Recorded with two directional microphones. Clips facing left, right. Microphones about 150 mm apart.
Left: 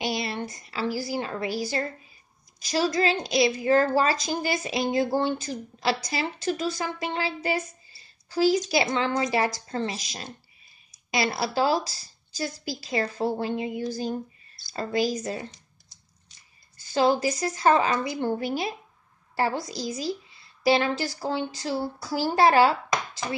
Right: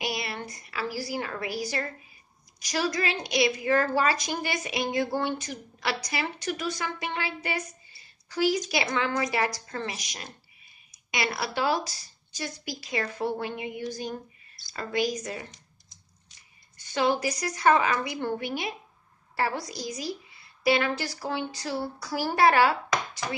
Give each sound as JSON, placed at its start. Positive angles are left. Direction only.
{"t": 0.0, "sound": "a woman's voice", "side_deg": 25}
{"t": 16.8, "sound": "a woman's voice", "side_deg": 30}